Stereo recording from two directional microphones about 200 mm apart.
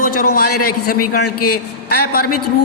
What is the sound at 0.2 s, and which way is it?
A man's voice, 45° left (ahead or behind).